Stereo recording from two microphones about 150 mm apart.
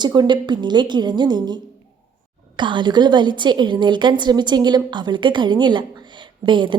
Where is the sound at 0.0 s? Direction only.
30° right (ahead or behind).